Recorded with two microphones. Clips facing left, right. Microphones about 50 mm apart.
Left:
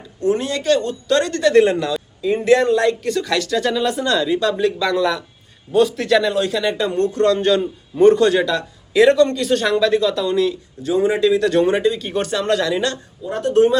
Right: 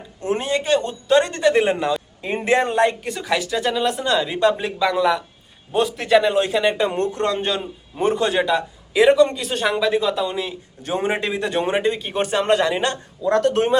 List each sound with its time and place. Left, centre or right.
0.2 s speech: right
3.0 s a man's voice: centre
4.3 s speech: right
4.6 s a man's voice: centre
7.5 s a man's voice: centre
10.8 s a man's voice: right
11.3 s a man's voice: right
12.3 s speech: right
13.2 s speech: right
13.5 s speech: right